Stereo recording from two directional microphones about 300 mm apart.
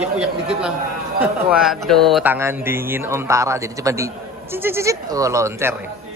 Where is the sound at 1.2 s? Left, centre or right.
Centre.